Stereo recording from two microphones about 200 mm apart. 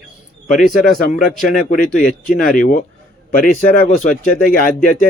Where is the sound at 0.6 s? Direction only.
45° left (ahead or behind).